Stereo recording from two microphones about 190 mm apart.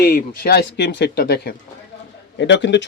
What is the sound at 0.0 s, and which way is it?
Speech, 55° left (ahead or behind).